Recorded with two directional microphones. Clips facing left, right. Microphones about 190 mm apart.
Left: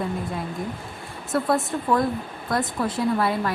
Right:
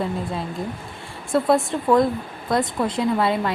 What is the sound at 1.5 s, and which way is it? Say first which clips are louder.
A woman's voice: right 5 dB; 20° right (ahead or behind).